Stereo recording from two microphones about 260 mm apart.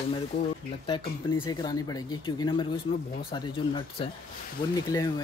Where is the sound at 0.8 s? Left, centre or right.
Centre.